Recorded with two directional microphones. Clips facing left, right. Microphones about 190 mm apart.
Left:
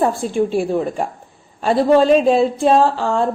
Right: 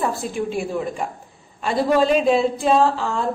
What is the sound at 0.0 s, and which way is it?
A woman's voice, 30° left (ahead or behind).